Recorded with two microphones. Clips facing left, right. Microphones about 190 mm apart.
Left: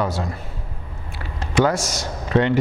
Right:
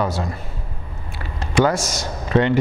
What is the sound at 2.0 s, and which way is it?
Speech, 20° right (ahead or behind).